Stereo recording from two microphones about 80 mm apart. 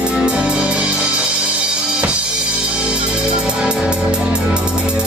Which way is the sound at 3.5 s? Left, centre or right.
Centre.